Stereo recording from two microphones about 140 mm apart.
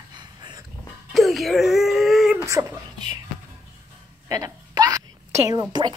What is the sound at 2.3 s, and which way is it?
Speech, 20° right (ahead or behind).